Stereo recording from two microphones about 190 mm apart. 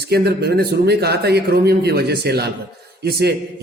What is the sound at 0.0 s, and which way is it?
A man's voice, 60° right (ahead or behind).